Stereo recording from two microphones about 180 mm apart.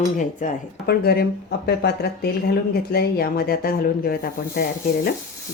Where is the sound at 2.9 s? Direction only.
60° left (ahead or behind).